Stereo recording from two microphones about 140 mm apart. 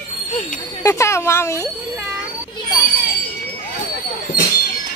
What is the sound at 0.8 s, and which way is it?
Speech, 20° left (ahead or behind).